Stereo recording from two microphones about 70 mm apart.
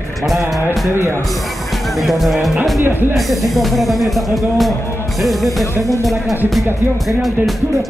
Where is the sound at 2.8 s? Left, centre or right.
Right.